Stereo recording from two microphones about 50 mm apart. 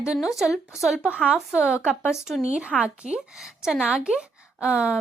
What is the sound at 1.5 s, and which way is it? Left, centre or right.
A woman's voice, centre.